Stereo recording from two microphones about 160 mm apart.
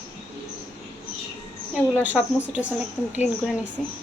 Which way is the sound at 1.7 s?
10° right (ahead or behind).